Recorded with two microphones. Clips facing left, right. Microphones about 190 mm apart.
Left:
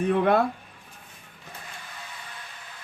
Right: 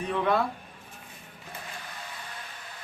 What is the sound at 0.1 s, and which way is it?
Speech, 55° left (ahead or behind).